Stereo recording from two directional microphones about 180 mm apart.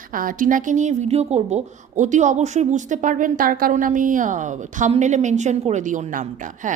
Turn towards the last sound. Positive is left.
turn(degrees=-45)  # may be behind; listen again after turning